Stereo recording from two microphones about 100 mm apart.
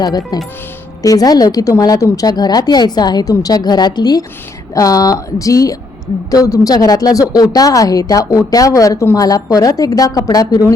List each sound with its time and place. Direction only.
1.0 s a woman's voice: 40° left (ahead or behind)